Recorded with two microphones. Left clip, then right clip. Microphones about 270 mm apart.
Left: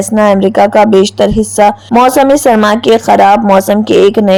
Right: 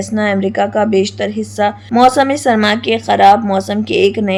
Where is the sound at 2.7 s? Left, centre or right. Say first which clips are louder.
Left 7 dB; left.